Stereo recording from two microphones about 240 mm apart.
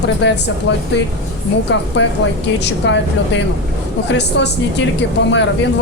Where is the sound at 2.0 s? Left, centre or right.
Left.